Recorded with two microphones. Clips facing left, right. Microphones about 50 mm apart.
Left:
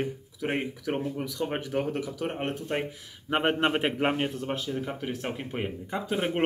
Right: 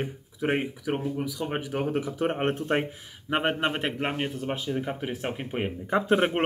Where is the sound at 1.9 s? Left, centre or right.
Right.